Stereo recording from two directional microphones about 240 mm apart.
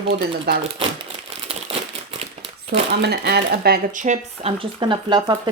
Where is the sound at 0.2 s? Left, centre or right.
Right.